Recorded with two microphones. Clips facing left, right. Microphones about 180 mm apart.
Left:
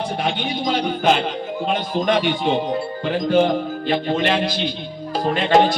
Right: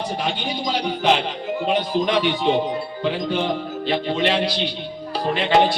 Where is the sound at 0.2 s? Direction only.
50° left (ahead or behind).